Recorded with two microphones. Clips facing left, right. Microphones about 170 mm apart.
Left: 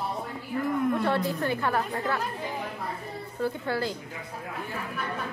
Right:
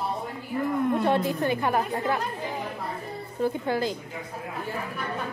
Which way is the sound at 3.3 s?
20° right (ahead or behind).